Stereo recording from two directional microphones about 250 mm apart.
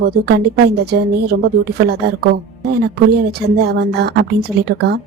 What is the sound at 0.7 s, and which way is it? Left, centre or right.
Speech, right.